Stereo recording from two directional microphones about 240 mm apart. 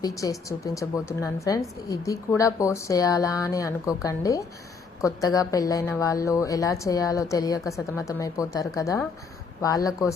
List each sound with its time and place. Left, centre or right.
0.0 s a woman's voice: centre